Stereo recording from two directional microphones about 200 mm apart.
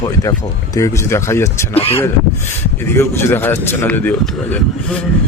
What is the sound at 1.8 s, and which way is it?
Speech, 30° left (ahead or behind).